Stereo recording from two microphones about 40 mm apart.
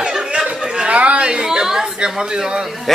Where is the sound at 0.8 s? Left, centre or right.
Right.